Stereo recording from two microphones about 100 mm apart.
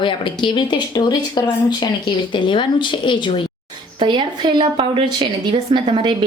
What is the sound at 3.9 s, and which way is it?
A woman's voice, 55° right (ahead or behind).